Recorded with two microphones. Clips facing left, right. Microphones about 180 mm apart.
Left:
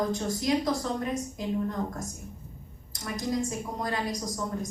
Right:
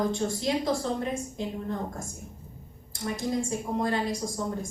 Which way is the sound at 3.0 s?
25° right (ahead or behind).